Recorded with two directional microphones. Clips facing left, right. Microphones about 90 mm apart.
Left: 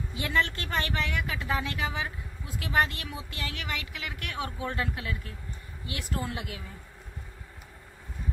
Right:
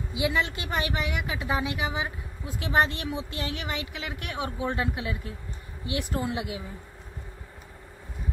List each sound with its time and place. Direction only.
0.1 s a woman's voice: 15° right (ahead or behind)